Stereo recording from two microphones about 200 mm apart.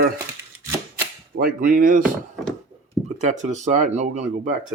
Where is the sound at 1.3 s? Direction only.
45° right (ahead or behind).